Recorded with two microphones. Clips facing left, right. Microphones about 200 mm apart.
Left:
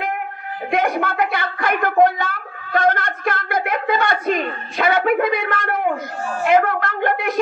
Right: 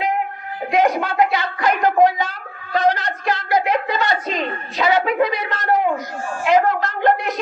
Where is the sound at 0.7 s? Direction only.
55° left (ahead or behind).